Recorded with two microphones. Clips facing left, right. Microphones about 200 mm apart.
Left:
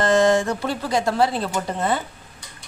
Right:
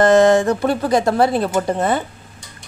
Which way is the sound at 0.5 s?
55° right (ahead or behind).